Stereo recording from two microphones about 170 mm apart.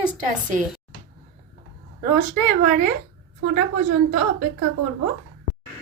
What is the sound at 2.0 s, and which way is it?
Speech, 55° right (ahead or behind).